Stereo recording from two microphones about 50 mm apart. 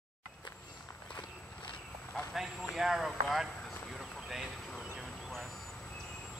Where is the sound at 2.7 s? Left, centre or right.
Centre.